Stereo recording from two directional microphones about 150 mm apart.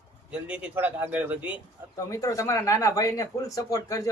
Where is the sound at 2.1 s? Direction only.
20° left (ahead or behind).